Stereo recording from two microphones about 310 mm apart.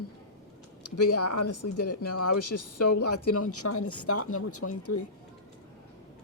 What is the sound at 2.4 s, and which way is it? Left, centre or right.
Speech, left.